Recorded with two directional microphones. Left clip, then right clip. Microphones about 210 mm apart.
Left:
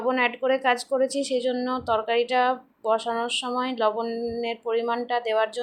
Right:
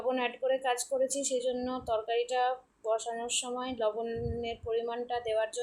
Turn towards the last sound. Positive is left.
turn(degrees=15)  # may be behind; listen again after turning